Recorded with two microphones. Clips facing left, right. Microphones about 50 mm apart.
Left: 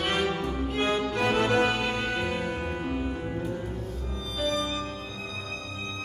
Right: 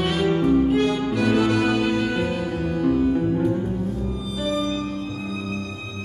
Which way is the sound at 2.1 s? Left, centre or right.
Centre.